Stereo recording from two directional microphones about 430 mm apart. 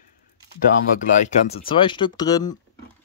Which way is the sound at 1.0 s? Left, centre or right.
Centre.